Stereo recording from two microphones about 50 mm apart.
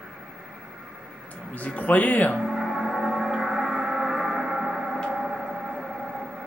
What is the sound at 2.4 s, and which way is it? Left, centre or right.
Gong, centre.